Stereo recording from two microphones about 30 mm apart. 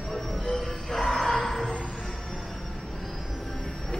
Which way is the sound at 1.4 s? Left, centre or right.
Centre.